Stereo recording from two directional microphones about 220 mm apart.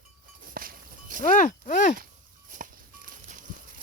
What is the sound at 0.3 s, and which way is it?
Livestock, 40° right (ahead or behind).